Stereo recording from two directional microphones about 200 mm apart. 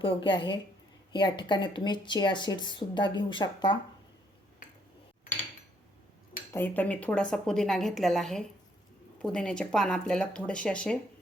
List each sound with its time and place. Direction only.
0.0 s speech: 25° left (ahead or behind)
6.5 s a woman's voice: 10° left (ahead or behind)